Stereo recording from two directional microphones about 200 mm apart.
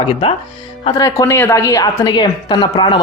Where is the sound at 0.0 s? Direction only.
25° left (ahead or behind).